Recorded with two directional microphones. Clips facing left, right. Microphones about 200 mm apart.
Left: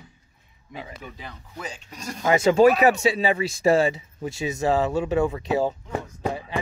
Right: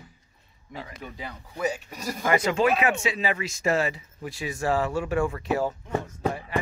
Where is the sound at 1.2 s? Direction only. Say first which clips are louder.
Right 6 dB; 10° right (ahead or behind).